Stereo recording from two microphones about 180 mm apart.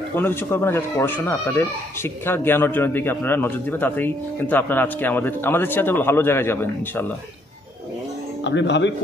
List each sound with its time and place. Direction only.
0.1 s speech: 10° left (ahead or behind)
8.5 s speech: 80° left